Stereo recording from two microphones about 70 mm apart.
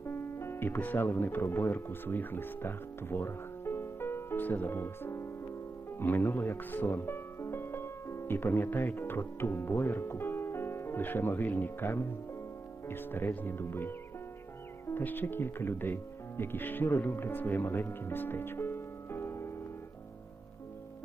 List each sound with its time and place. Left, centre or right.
0.0 s speech: left
15.0 s speech: left